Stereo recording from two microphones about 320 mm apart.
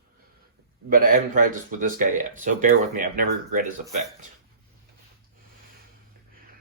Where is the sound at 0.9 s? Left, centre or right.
Right.